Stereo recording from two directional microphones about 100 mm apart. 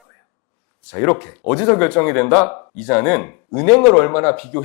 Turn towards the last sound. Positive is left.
turn(degrees=15)  # may be behind; listen again after turning